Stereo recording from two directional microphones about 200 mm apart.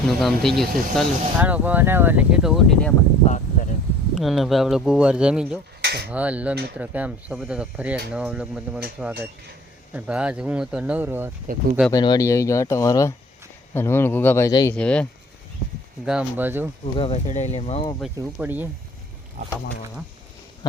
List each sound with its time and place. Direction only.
0.2 s speech: centre (ahead or behind)
3.2 s a sound: 40° left (ahead or behind)
4.1 s speech: centre (ahead or behind)
5.8 s a sound: 55° right (ahead or behind)
6.1 s speech: 5° right (ahead or behind)
11.9 s speech: 20° left (ahead or behind)
14.8 s speech: 5° left (ahead or behind)
16.0 s speech: 5° right (ahead or behind)
16.8 s speech: 30° left (ahead or behind)
18.3 s speech: 10° right (ahead or behind)